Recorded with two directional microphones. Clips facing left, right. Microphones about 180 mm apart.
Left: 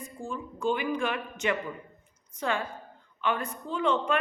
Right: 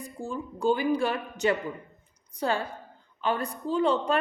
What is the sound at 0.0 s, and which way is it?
A woman's voice, 35° right (ahead or behind).